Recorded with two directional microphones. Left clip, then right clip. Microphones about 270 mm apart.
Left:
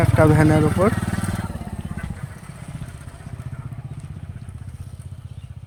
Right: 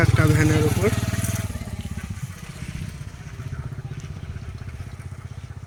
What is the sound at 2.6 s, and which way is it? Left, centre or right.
Vehicle, centre.